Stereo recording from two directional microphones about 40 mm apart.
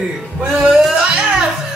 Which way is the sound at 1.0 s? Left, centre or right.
Right.